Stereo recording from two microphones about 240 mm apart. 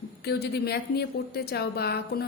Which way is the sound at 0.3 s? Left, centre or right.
Left.